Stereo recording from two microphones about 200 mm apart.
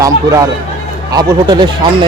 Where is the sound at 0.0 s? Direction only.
15° right (ahead or behind).